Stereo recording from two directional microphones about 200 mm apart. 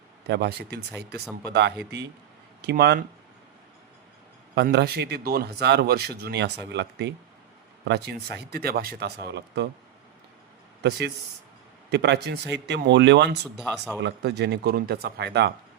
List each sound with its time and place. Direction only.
0.3 s speech: 55° right (ahead or behind)
2.6 s speech: 55° right (ahead or behind)
4.5 s speech: 55° right (ahead or behind)
10.8 s speech: 60° right (ahead or behind)
13.6 s speech: 5° left (ahead or behind)
14.0 s speech: 55° right (ahead or behind)